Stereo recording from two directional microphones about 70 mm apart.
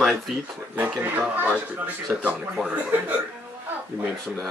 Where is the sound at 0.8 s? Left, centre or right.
Right.